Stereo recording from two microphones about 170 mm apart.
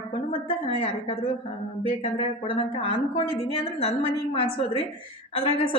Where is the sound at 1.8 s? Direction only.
35° left (ahead or behind).